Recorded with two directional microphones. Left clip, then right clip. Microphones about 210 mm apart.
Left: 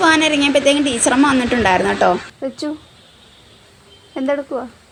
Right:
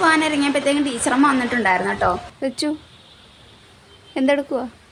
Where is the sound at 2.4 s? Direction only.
10° right (ahead or behind).